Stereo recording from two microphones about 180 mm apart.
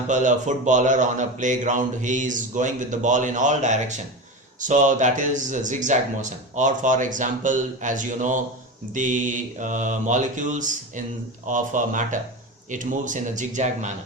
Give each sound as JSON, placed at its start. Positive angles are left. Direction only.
{"t": 0.1, "sound": "speech", "side_deg": -45}